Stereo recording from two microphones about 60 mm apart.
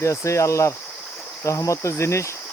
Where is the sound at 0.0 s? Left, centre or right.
Left.